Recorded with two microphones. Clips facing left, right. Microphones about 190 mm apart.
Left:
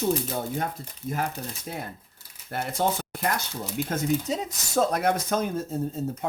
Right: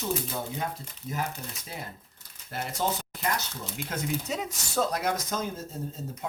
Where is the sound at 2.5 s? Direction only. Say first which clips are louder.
Left 4 dB; 55° left (ahead or behind).